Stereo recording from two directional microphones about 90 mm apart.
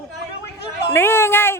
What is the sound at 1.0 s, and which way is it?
Speech, 25° left (ahead or behind).